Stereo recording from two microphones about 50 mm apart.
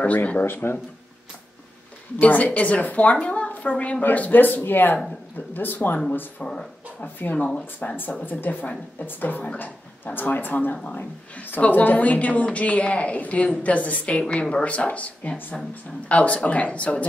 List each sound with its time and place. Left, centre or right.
0.0 s speech: left
0.5 s speech: left
2.1 s a woman's voice: left
4.0 s speech: left
6.4 s a woman's voice: left
7.2 s speech: left
7.4 s a woman's voice: left
8.3 s a woman's voice: left